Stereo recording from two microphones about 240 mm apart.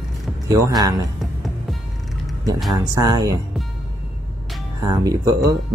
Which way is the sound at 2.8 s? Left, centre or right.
Centre.